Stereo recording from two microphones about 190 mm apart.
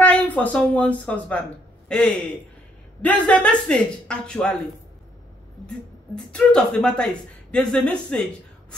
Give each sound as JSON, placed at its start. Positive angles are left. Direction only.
{"t": 0.0, "sound": "a woman's voice", "side_deg": 10}
{"t": 6.1, "sound": "speech", "side_deg": 5}